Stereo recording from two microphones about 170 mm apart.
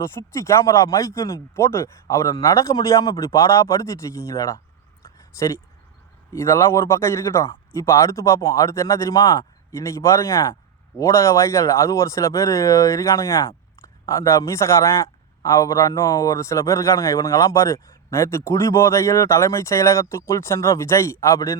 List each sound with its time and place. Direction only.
0.0 s a man's voice: 15° left (ahead or behind)
6.3 s a man's voice: 15° left (ahead or behind)